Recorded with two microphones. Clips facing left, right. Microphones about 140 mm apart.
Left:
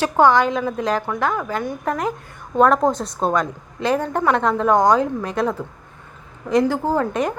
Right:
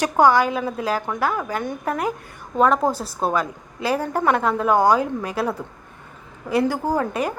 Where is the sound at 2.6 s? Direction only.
Centre (ahead or behind).